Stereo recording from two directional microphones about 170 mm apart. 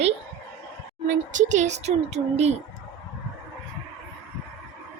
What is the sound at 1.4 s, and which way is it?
Speech, 45° right (ahead or behind).